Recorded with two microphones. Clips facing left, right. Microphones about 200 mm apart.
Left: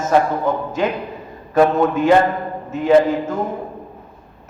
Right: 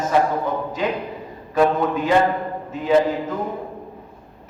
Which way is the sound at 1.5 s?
50° left (ahead or behind).